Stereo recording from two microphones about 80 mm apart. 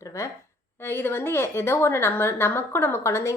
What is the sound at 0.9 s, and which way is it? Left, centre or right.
A woman's voice, left.